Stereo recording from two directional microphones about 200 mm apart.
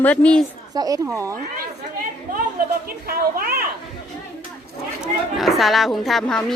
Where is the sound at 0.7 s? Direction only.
15° right (ahead or behind).